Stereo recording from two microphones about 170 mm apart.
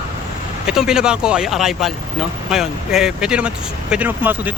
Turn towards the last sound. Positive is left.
turn(degrees=-10)  # may be behind; listen again after turning